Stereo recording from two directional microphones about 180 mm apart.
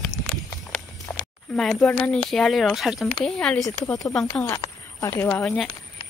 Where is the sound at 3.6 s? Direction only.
20° left (ahead or behind).